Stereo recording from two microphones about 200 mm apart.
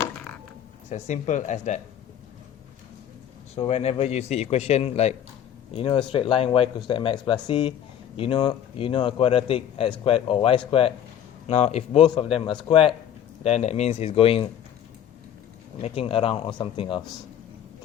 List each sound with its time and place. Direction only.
0.9 s speech: 35° left (ahead or behind)
3.5 s speech: 30° left (ahead or behind)
15.8 s speech: 25° left (ahead or behind)